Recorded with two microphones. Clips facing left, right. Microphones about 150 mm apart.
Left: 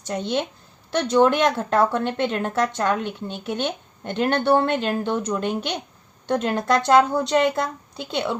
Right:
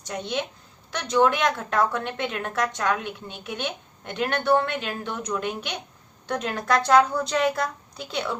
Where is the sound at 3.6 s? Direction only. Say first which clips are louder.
Left 5 dB; 30° left (ahead or behind).